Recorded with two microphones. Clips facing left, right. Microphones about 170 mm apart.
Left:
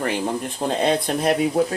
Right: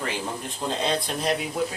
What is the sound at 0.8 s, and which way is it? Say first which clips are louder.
Speech: left 7 dB; 55° left (ahead or behind).